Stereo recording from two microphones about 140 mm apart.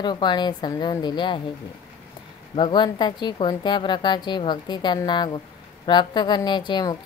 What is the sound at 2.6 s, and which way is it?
A woman's voice, 30° left (ahead or behind).